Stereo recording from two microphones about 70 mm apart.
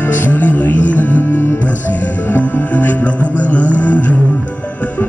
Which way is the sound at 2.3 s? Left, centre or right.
Left.